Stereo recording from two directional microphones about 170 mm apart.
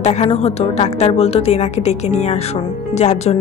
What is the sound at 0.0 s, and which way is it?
A woman's voice, 40° left (ahead or behind).